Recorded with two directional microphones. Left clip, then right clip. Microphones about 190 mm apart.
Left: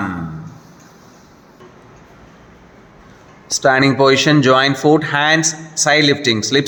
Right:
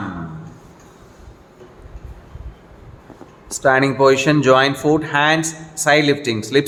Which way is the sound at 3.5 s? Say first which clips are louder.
Left 2 dB; 20° left (ahead or behind).